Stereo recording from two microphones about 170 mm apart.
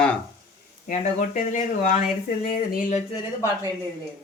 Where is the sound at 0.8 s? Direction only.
50° left (ahead or behind).